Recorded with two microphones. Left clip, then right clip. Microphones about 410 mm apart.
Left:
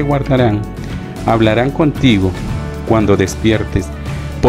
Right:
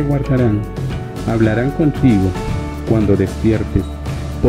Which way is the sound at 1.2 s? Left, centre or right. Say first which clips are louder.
Left 5 dB; left.